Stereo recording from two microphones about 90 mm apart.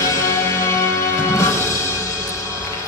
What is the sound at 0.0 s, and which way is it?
Music, 35° left (ahead or behind).